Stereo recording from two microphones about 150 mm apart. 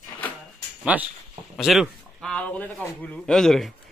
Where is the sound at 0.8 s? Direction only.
10° right (ahead or behind).